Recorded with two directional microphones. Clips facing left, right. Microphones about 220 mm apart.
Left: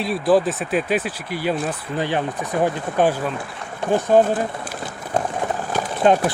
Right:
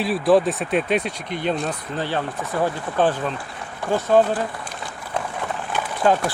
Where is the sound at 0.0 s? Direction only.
Centre (ahead or behind).